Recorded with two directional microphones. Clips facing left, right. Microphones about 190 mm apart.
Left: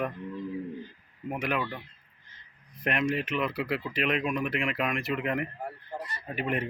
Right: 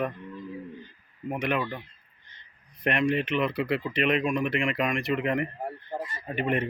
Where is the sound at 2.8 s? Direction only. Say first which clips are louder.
Right 3 dB; centre (ahead or behind).